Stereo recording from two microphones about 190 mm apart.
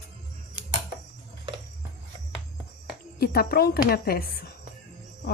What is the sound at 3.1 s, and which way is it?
A woman's voice, 55° left (ahead or behind).